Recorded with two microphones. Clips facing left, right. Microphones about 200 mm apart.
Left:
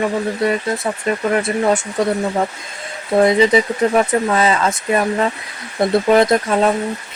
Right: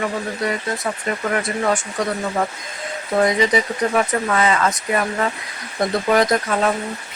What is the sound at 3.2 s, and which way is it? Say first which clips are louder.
Speech: left 5 dB; 25° left (ahead or behind).